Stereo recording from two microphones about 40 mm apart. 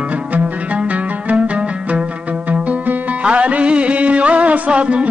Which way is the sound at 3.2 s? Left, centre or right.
Right.